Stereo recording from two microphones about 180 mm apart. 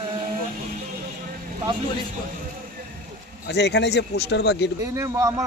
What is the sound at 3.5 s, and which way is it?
Speech, 70° left (ahead or behind).